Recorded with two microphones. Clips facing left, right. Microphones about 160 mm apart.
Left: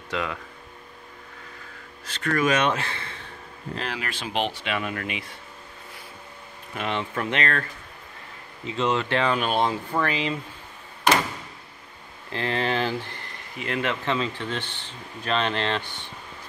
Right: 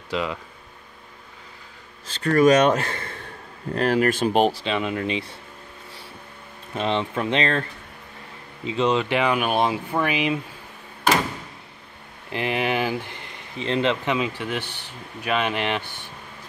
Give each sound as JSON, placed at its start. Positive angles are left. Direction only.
{"t": 0.1, "sound": "speech", "side_deg": -15}
{"t": 2.0, "sound": "speech", "side_deg": -35}
{"t": 4.7, "sound": "speech", "side_deg": -20}
{"t": 6.7, "sound": "speech", "side_deg": -25}
{"t": 8.6, "sound": "speech", "side_deg": -15}
{"t": 12.3, "sound": "speech", "side_deg": -15}